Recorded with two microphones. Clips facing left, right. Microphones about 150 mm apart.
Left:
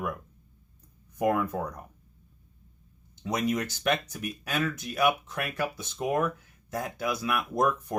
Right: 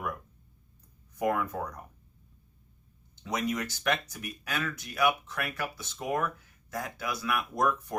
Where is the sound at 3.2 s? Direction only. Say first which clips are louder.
Left 3 dB; 25° left (ahead or behind).